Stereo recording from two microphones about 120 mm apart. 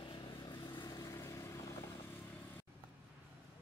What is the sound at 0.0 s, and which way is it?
Vehicle, 40° left (ahead or behind).